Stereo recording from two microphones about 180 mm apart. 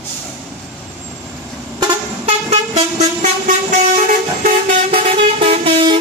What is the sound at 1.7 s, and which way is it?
Vehicle, 30° right (ahead or behind).